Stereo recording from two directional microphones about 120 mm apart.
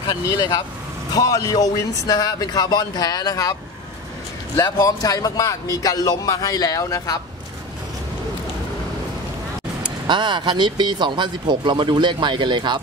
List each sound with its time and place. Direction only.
0.0 s a man's voice: 30° left (ahead or behind)
4.6 s a man's voice: 30° left (ahead or behind)
10.0 s speech: 40° right (ahead or behind)